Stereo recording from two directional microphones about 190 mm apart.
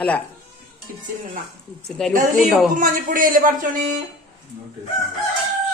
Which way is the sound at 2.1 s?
45° right (ahead or behind).